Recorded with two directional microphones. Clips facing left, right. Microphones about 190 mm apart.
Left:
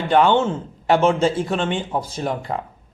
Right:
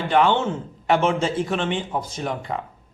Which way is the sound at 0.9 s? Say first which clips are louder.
Left 3 dB; 30° left (ahead or behind).